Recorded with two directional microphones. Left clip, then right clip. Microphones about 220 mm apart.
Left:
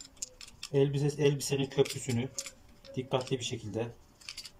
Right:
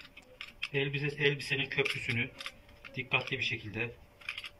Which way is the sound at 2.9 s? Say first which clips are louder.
Even; 25° left (ahead or behind).